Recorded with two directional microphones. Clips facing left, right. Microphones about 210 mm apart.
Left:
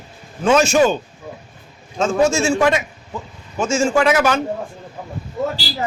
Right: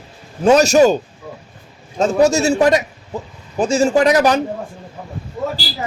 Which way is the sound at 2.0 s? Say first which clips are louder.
Right 3 dB; 40° right (ahead or behind).